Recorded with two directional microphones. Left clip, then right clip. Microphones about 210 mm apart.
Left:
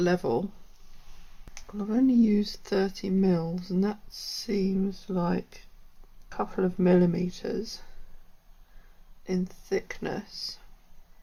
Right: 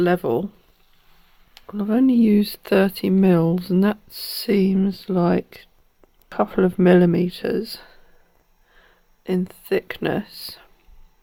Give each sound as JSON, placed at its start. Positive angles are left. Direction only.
{"t": 0.0, "sound": "speech", "side_deg": -35}
{"t": 1.5, "sound": "speech", "side_deg": -45}
{"t": 9.2, "sound": "speech", "side_deg": -45}